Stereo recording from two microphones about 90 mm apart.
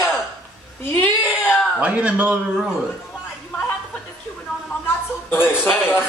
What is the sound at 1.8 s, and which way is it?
Speech, 15° right (ahead or behind).